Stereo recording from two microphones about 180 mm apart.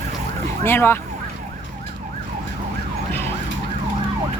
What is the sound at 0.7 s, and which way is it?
Speech, 10° left (ahead or behind).